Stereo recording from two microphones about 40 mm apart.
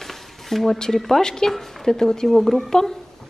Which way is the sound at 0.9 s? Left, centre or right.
Centre.